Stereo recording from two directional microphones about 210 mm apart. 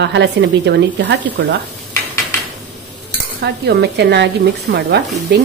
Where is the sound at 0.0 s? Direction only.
55° right (ahead or behind).